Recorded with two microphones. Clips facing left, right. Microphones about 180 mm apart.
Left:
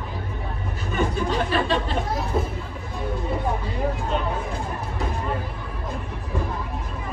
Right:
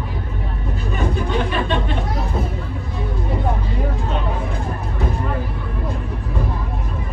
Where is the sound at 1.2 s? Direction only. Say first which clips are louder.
Right 1 dB; 35° left (ahead or behind).